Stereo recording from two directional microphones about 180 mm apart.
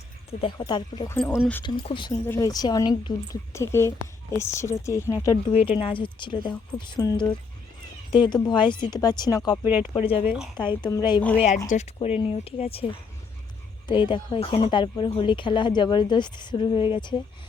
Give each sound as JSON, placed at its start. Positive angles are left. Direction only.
{"t": 0.6, "sound": "a woman's voice", "side_deg": 20}
{"t": 1.6, "sound": "speech", "side_deg": 30}
{"t": 2.2, "sound": "a woman's voice", "side_deg": 15}
{"t": 5.5, "sound": "speech", "side_deg": 35}
{"t": 9.9, "sound": "speech", "side_deg": 30}
{"t": 10.2, "sound": "a woman's voice", "side_deg": -5}
{"t": 10.8, "sound": "speech", "side_deg": 20}
{"t": 11.3, "sound": "speech", "side_deg": 40}